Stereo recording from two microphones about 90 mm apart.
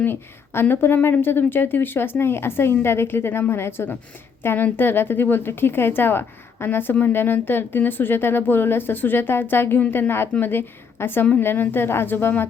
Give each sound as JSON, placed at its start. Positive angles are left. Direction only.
{"t": 0.0, "sound": "a woman's voice", "side_deg": 25}